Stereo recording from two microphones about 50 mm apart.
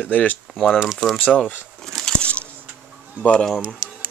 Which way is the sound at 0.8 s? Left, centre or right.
Centre.